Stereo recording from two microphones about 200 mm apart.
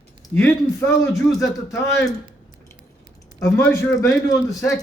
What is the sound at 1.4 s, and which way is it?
Speech, 15° left (ahead or behind).